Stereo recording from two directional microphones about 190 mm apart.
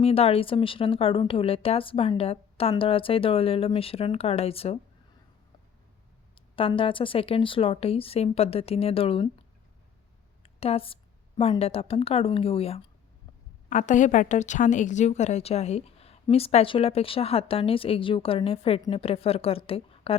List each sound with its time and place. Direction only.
0.0 s speech: 30° left (ahead or behind)
6.3 s speech: 30° left (ahead or behind)
10.4 s a sound: 30° left (ahead or behind)
11.3 s a woman's voice: 30° left (ahead or behind)
13.7 s a woman's voice: 40° left (ahead or behind)